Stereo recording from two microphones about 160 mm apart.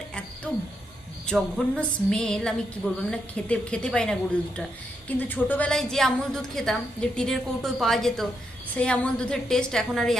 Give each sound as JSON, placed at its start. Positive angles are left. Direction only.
{"t": 0.5, "sound": "a woman's voice", "side_deg": 10}